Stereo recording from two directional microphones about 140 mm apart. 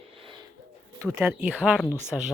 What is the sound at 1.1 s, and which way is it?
Speech, 15° right (ahead or behind).